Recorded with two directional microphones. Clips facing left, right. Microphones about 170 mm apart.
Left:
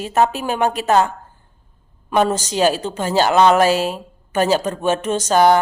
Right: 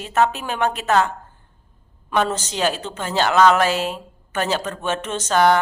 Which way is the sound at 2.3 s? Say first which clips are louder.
Left 5 dB; 40° left (ahead or behind).